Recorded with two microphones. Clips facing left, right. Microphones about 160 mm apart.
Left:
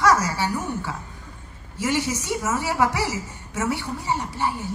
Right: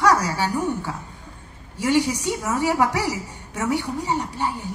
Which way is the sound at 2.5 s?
15° right (ahead or behind).